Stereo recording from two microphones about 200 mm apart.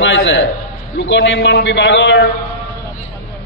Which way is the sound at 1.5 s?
65° left (ahead or behind).